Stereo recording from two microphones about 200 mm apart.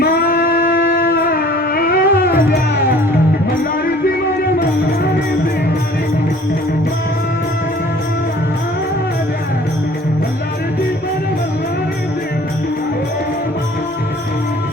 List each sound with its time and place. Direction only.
0.0 s shofar: 45° left (ahead or behind)
0.7 s wind instrument: 45° left (ahead or behind)